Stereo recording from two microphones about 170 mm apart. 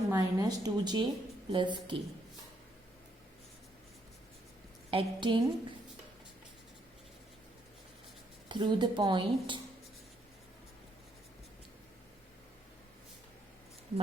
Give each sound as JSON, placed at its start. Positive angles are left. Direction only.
{"t": 0.1, "sound": "speech", "side_deg": -20}
{"t": 4.9, "sound": "speech", "side_deg": -30}
{"t": 8.4, "sound": "speech", "side_deg": -25}